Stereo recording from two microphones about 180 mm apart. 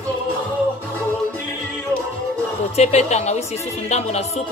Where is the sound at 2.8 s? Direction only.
40° left (ahead or behind).